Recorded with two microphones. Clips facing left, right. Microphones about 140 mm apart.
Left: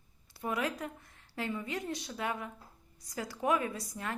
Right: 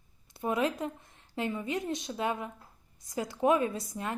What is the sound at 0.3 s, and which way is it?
A woman's voice, 25° right (ahead or behind).